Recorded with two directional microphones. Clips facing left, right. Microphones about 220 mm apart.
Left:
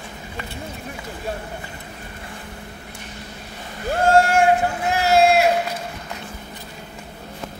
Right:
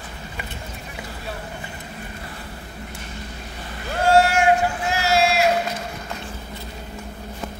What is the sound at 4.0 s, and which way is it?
Vehicle, 50° left (ahead or behind).